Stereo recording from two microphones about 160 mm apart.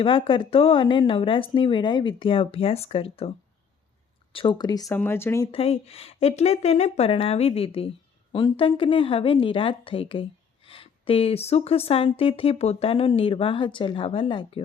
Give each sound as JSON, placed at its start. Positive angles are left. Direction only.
{"t": 0.0, "sound": "a woman's voice", "side_deg": 30}
{"t": 5.5, "sound": "a woman's voice", "side_deg": 40}